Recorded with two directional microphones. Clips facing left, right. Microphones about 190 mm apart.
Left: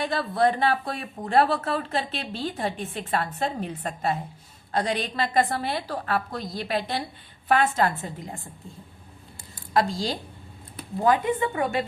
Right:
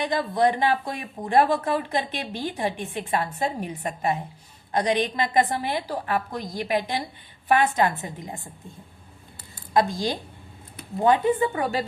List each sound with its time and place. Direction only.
0.0 s speech: 15° right (ahead or behind)
9.7 s a woman's voice: 20° right (ahead or behind)
11.0 s a woman's voice: 30° right (ahead or behind)